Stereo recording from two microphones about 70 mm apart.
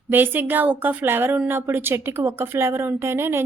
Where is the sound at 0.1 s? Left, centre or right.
Right.